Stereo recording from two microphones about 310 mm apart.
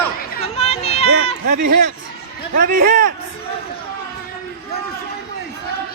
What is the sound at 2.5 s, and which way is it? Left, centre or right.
Speech, right.